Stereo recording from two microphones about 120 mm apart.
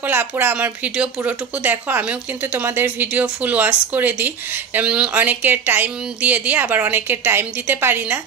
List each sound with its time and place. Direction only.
0.0 s speech: 15° right (ahead or behind)